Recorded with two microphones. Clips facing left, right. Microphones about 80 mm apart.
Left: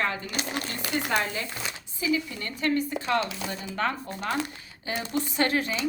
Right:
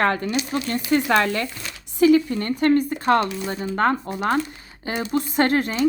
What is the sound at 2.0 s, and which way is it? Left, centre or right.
Speech, right.